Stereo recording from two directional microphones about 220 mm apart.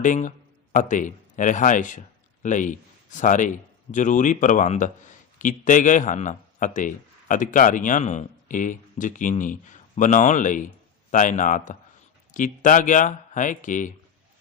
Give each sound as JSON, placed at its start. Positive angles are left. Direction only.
{"t": 0.0, "sound": "a man's voice", "side_deg": 35}